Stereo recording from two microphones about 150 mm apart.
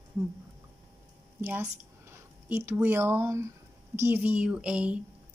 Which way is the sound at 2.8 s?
15° right (ahead or behind).